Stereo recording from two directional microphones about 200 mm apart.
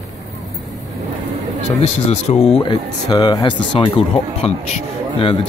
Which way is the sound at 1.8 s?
30° left (ahead or behind).